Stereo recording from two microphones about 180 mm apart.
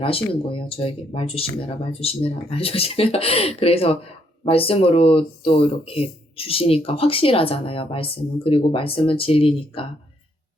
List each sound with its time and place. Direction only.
0.0 s speech: 30° left (ahead or behind)